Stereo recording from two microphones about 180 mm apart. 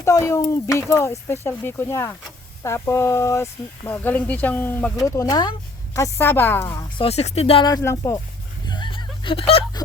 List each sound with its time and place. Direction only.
0.0 s speech: 15° left (ahead or behind)
7.0 s speech: 35° left (ahead or behind)
7.7 s speech: 15° left (ahead or behind)
8.6 s a sound: 25° left (ahead or behind)